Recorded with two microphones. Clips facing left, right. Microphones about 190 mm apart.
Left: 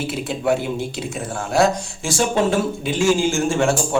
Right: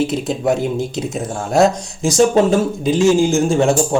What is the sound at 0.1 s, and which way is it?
Speech, 40° right (ahead or behind).